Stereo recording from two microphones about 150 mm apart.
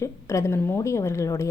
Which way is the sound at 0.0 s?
20° left (ahead or behind).